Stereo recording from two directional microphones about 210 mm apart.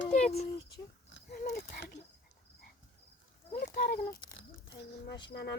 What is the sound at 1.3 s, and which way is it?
Speech, 45° left (ahead or behind).